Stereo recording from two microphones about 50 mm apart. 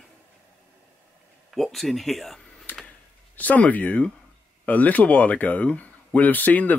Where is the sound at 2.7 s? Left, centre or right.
Left.